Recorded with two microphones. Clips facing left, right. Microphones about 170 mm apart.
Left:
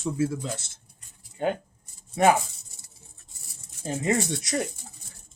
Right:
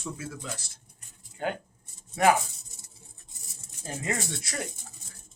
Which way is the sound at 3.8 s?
20° left (ahead or behind).